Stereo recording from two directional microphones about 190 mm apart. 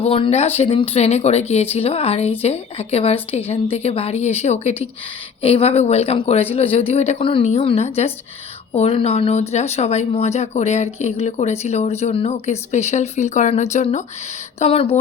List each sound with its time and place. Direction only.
0.0 s speech: 30° left (ahead or behind)